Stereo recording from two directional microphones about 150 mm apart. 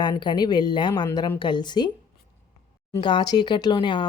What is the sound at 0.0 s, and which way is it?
Speech, 30° left (ahead or behind).